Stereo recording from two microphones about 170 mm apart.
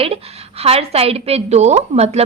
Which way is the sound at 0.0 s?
35° right (ahead or behind).